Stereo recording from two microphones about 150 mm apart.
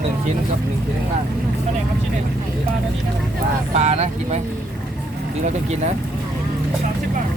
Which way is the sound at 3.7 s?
45° right (ahead or behind).